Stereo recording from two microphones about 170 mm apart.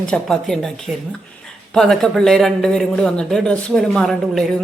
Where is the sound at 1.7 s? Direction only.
5° left (ahead or behind).